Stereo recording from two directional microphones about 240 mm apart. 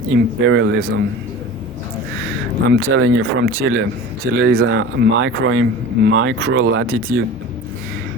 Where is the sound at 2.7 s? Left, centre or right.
Right.